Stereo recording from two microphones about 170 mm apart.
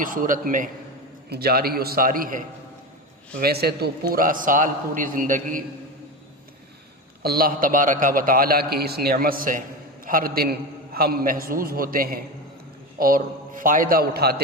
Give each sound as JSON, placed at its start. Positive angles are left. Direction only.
{"t": 0.0, "sound": "a man's voice", "side_deg": -55}
{"t": 1.3, "sound": "a man's voice", "side_deg": -65}
{"t": 3.4, "sound": "a man's voice", "side_deg": -65}
{"t": 4.1, "sound": "a man's voice", "side_deg": -55}
{"t": 7.2, "sound": "a man's voice", "side_deg": -60}